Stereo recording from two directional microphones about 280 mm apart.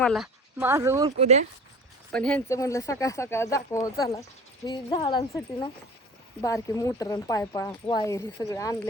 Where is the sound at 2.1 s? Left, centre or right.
Centre.